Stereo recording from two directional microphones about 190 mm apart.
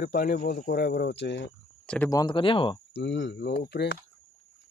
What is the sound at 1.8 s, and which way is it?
Speech, 5° left (ahead or behind).